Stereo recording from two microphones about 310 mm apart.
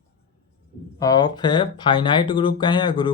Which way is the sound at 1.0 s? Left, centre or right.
Centre.